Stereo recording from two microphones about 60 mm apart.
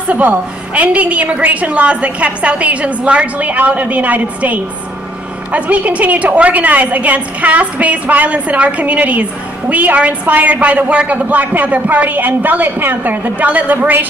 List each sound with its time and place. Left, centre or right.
0.1 s a woman's voice: right